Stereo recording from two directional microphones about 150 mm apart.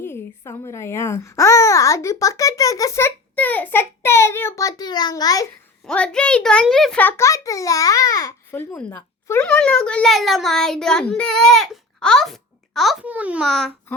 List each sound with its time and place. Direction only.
0.0 s speech: 15° left (ahead or behind)
5.8 s a child's voice: 5° left (ahead or behind)
13.5 s a child's voice: 5° left (ahead or behind)